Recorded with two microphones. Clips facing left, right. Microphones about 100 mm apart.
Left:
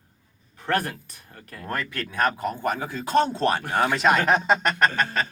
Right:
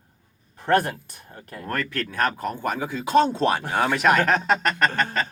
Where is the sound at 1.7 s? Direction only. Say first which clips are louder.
Right 2 dB; 5° left (ahead or behind).